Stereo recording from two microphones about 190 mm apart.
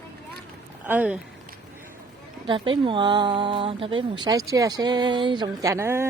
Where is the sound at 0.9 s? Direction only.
5° right (ahead or behind).